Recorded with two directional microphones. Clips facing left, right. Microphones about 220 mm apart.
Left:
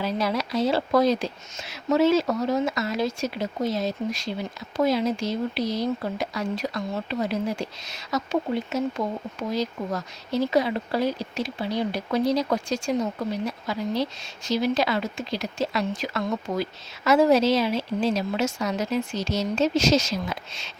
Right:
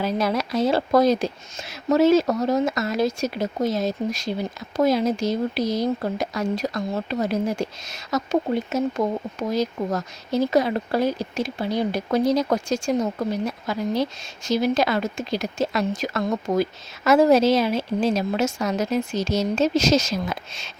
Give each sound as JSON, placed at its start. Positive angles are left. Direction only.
{"t": 0.0, "sound": "speech", "side_deg": -50}